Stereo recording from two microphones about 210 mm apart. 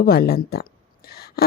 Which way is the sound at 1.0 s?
45° left (ahead or behind).